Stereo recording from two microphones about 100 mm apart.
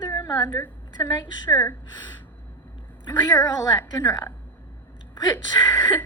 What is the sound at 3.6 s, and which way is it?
A woman's voice, 45° left (ahead or behind).